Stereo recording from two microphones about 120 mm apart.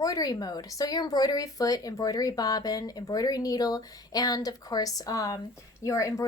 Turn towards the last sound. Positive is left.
turn(degrees=25)  # may be behind; listen again after turning